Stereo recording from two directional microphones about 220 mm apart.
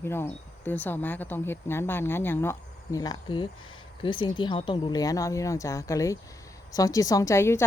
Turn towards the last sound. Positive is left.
turn(degrees=10)  # may be behind; listen again after turning